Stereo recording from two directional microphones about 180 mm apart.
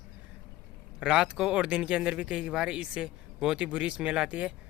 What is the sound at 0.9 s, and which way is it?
Speech, 5° right (ahead or behind).